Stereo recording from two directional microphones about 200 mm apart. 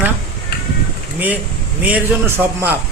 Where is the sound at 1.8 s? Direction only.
10° right (ahead or behind).